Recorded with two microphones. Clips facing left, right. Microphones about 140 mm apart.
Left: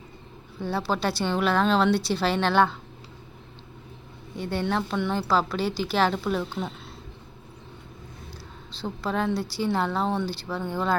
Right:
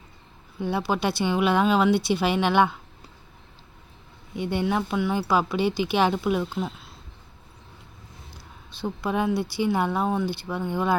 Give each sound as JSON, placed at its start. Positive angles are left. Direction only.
{"t": 0.6, "sound": "speech", "side_deg": -15}
{"t": 4.4, "sound": "speech", "side_deg": -15}
{"t": 4.6, "sound": "speech", "side_deg": -5}
{"t": 6.4, "sound": "speech", "side_deg": 0}
{"t": 8.7, "sound": "speech", "side_deg": -15}